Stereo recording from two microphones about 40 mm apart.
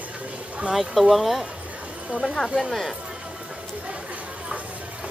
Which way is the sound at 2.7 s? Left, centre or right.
Centre.